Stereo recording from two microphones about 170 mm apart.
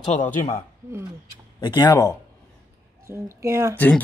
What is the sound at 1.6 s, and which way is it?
Speech, 25° left (ahead or behind).